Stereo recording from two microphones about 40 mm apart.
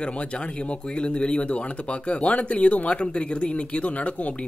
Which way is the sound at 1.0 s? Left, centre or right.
Left.